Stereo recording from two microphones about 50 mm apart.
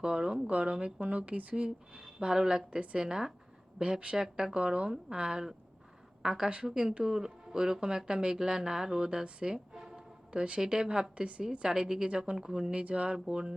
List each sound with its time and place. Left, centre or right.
0.0 s speech: centre